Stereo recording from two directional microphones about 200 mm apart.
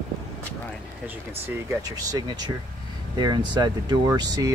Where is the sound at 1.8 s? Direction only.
20° right (ahead or behind).